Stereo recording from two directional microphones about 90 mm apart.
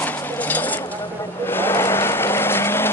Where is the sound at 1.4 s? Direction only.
25° left (ahead or behind).